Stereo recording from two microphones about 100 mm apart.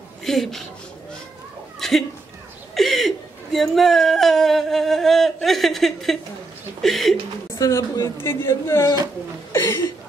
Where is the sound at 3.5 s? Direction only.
Centre (ahead or behind).